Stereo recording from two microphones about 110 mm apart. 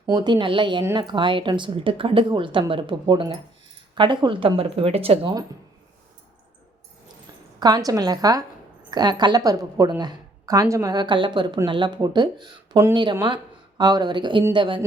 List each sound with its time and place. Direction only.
0.1 s a woman's voice: 45° right (ahead or behind); by 5.3 s 60° right (ahead or behind)
7.6 s speech: 35° right (ahead or behind)